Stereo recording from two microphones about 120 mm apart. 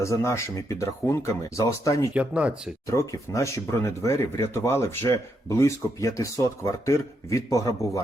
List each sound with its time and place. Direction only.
0.0 s speech: 25° left (ahead or behind)
2.1 s speech: 10° right (ahead or behind)
2.8 s speech: 25° left (ahead or behind)